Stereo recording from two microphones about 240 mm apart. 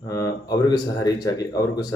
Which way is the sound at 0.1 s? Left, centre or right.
Centre.